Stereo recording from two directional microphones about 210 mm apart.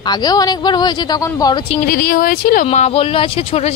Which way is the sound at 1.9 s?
45° left (ahead or behind).